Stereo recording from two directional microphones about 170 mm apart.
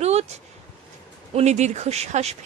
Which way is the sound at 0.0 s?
40° right (ahead or behind).